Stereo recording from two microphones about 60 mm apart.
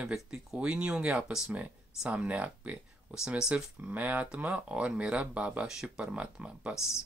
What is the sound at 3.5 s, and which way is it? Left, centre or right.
Speech, right.